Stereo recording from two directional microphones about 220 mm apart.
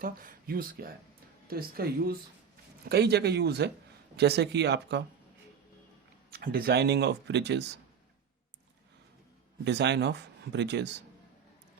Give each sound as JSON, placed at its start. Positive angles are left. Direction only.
{"t": 0.0, "sound": "speech", "side_deg": -40}
{"t": 6.3, "sound": "speech", "side_deg": -45}
{"t": 9.6, "sound": "speech", "side_deg": -50}